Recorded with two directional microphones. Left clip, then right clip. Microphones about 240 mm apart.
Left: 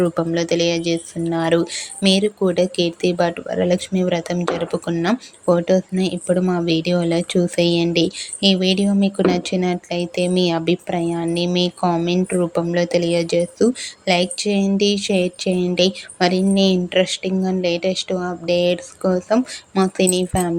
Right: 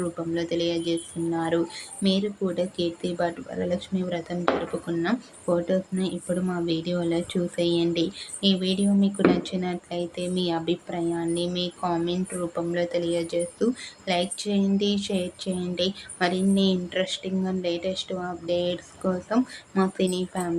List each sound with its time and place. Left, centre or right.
0.0 s a woman's voice: left